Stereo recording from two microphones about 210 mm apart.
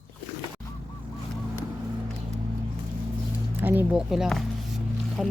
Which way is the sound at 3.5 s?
10° right (ahead or behind).